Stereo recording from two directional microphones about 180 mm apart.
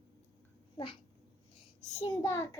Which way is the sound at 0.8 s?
30° left (ahead or behind).